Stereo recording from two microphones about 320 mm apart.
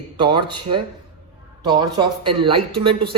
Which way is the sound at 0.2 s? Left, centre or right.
Centre.